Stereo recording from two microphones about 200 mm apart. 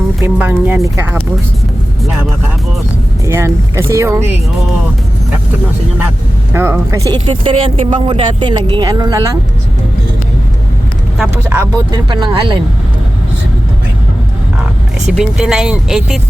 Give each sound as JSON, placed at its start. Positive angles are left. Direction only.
{"t": 0.2, "sound": "speech", "side_deg": -5}
{"t": 3.2, "sound": "speech", "side_deg": -15}
{"t": 6.5, "sound": "speech", "side_deg": -10}
{"t": 11.2, "sound": "speech", "side_deg": -10}
{"t": 15.0, "sound": "speech", "side_deg": 0}